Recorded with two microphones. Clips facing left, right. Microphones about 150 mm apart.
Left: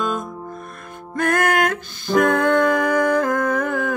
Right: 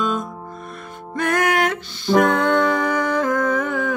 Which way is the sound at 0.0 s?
50° left (ahead or behind).